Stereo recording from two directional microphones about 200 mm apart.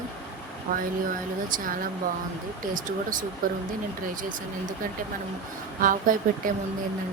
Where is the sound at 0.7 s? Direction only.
45° right (ahead or behind).